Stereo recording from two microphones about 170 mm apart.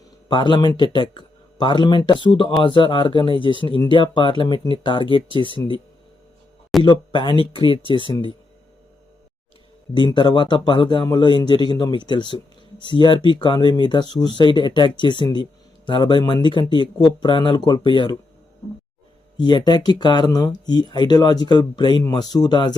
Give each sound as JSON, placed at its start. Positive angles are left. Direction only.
{"t": 0.3, "sound": "speech", "side_deg": 25}
{"t": 6.8, "sound": "speech", "side_deg": 25}
{"t": 9.9, "sound": "speech", "side_deg": 25}
{"t": 19.4, "sound": "speech", "side_deg": 25}